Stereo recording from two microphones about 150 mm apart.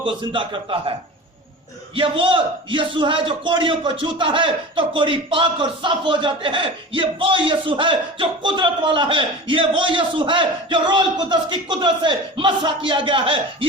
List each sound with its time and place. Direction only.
0.0 s a man's voice: 35° right (ahead or behind)
2.0 s a man's voice: 35° right (ahead or behind)